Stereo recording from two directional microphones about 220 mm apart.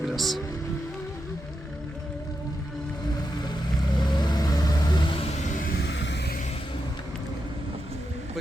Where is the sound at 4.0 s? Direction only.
20° left (ahead or behind).